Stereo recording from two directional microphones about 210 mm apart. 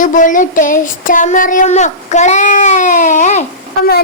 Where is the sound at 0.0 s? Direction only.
40° left (ahead or behind).